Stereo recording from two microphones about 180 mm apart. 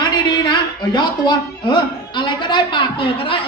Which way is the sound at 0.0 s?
25° left (ahead or behind).